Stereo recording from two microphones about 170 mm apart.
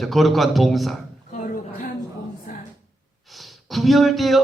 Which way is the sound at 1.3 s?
50° left (ahead or behind).